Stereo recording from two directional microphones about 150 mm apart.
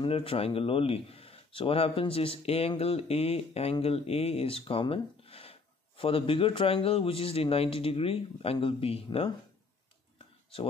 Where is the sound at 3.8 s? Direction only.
40° left (ahead or behind).